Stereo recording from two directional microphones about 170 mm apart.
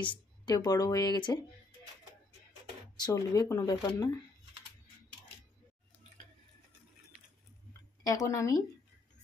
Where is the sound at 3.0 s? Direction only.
25° left (ahead or behind).